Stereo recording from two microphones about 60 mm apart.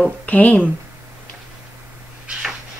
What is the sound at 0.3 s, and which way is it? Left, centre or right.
Speech, left.